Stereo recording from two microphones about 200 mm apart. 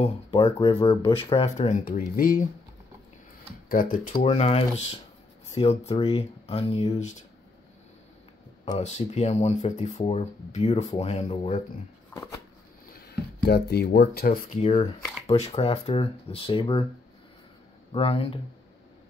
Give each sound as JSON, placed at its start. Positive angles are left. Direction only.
{"t": 0.0, "sound": "speech", "side_deg": 25}
{"t": 1.9, "sound": "speech", "side_deg": 45}
{"t": 4.1, "sound": "speech", "side_deg": 35}
{"t": 8.7, "sound": "speech", "side_deg": 35}
{"t": 12.1, "sound": "a sound", "side_deg": 15}
{"t": 13.4, "sound": "speech", "side_deg": 55}
{"t": 14.6, "sound": "speech", "side_deg": 30}
{"t": 17.9, "sound": "speech", "side_deg": 30}